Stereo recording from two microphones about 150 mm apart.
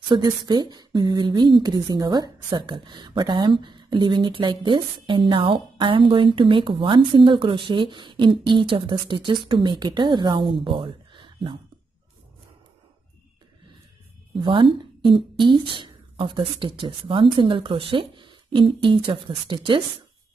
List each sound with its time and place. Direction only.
0.1 s speech: 30° right (ahead or behind)
14.3 s speech: 35° right (ahead or behind)